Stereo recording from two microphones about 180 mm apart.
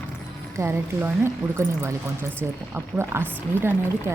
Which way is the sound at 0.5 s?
15° right (ahead or behind).